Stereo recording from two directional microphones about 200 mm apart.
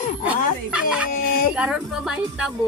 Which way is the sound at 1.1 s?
50° left (ahead or behind).